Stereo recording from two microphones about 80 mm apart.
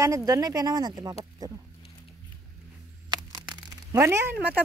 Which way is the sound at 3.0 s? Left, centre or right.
Right.